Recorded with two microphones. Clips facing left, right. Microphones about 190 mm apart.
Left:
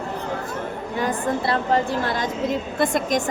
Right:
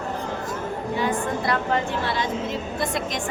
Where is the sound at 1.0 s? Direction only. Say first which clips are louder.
Left 3 dB; 40° left (ahead or behind).